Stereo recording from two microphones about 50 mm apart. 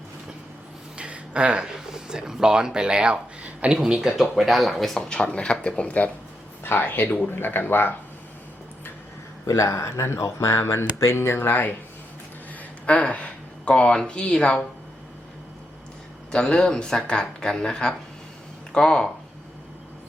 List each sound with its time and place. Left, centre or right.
0.9 s a sound: right
1.7 s speech: centre
4.0 s speech: centre
4.9 s speech: centre
6.6 s speech: left
9.5 s speech: left
12.8 s speech: left
16.3 s speech: centre